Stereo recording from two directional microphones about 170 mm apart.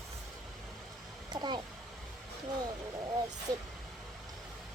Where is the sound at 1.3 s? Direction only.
25° right (ahead or behind).